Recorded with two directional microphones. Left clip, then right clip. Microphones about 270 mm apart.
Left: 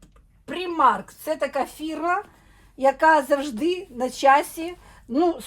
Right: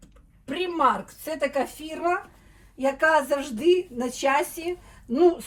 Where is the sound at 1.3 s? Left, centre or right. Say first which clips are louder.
Right 1 dB; left.